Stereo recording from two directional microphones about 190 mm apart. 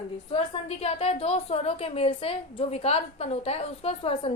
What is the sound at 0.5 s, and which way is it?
A woman's voice, 30° left (ahead or behind).